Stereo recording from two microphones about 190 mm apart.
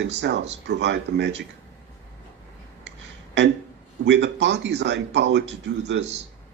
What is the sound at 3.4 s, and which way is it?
Speech, 65° right (ahead or behind).